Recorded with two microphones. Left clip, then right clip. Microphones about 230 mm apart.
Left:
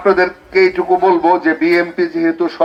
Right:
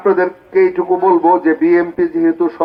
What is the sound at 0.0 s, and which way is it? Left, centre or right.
Speech, left.